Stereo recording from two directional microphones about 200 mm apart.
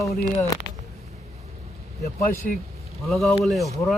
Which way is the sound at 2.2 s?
45° left (ahead or behind).